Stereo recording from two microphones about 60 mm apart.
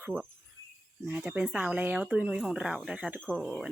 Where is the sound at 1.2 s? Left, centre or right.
Centre.